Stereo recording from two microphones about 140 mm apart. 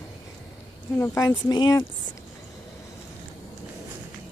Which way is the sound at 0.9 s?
20° left (ahead or behind).